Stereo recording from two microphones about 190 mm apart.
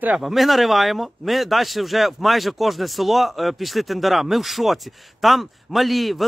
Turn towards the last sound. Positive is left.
turn(degrees=0)  # may be behind; listen again after turning